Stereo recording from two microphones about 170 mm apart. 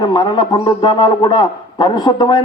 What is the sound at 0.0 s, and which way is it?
A man's voice, 25° left (ahead or behind).